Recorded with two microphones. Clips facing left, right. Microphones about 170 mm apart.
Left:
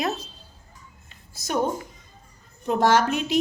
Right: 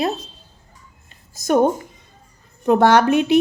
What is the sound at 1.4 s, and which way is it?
Speech, 50° right (ahead or behind).